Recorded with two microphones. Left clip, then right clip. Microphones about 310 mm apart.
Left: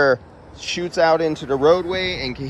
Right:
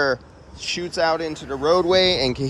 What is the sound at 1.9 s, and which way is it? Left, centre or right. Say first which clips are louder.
Speech: right 6 dB; centre.